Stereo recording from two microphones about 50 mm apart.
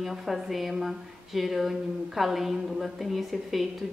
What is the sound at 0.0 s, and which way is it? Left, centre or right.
A woman's voice, centre.